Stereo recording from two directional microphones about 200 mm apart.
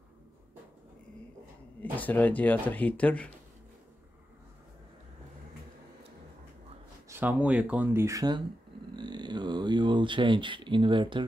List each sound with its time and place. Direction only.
1.8 s speech: 10° left (ahead or behind)
7.1 s speech: 10° right (ahead or behind)
8.9 s a sound: 20° right (ahead or behind)